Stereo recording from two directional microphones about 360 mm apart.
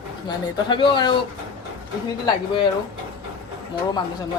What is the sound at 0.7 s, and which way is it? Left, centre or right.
Speech, centre.